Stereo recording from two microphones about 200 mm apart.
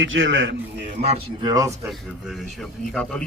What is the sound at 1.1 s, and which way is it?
Speech, 20° right (ahead or behind).